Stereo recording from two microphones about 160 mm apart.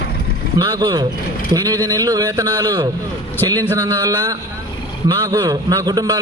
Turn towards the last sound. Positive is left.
turn(degrees=-25)  # may be behind; listen again after turning